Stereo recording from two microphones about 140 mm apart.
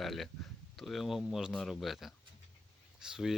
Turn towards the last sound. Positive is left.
turn(degrees=-5)  # may be behind; listen again after turning